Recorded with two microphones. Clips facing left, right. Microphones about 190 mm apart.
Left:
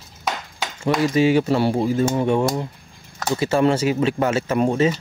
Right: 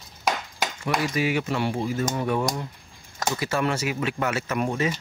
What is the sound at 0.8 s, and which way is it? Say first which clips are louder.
Speech: left 8 dB; 30° left (ahead or behind).